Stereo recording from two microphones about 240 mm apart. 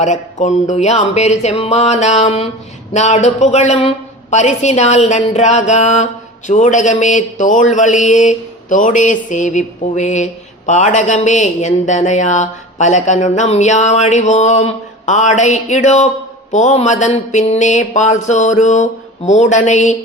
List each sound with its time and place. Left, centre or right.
0.0 s speech: left
6.5 s mantra: left
10.7 s speech: left